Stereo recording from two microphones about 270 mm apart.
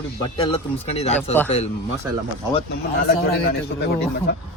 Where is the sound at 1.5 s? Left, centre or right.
Left.